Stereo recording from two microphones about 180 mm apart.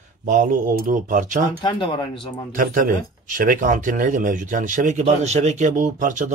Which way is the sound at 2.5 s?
50° right (ahead or behind).